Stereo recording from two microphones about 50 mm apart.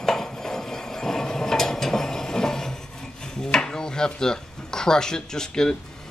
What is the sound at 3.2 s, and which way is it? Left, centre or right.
Speech, centre.